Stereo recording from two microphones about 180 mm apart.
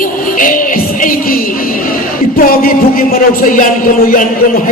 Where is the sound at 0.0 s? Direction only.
50° left (ahead or behind).